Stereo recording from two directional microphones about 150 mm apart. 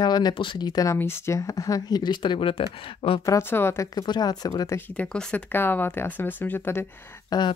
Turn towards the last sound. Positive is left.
turn(degrees=25)  # may be behind; listen again after turning